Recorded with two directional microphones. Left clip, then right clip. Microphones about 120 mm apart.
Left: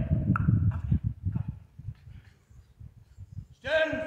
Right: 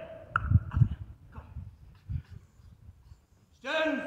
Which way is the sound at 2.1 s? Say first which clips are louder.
Right 11 dB; 10° left (ahead or behind).